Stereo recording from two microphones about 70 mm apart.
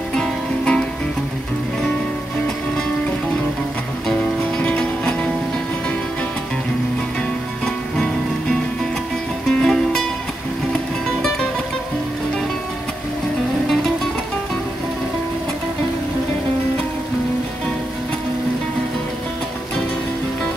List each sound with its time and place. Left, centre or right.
0.1 s music: centre
4.1 s music: centre
7.6 s music: centre